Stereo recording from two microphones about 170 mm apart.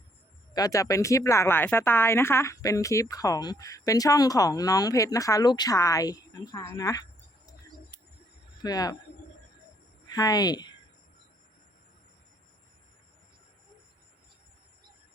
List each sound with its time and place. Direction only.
0.5 s speech: 20° left (ahead or behind)
8.6 s speech: 20° left (ahead or behind)
10.1 s speech: 20° left (ahead or behind)